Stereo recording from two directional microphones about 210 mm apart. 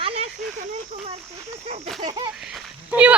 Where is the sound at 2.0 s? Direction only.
20° right (ahead or behind).